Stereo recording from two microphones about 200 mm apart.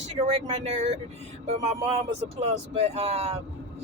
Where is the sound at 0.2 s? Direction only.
30° right (ahead or behind).